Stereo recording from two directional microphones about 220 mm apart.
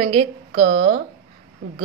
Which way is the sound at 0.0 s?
25° right (ahead or behind).